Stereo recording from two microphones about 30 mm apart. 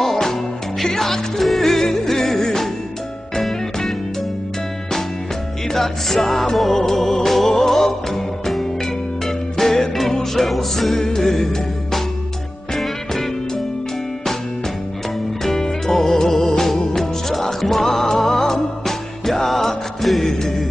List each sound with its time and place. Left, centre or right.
0.0 s music: left
5.7 s music: centre
9.8 s music: centre
10.5 s music: centre
12.7 s music: centre
15.4 s music: centre
17.8 s music: centre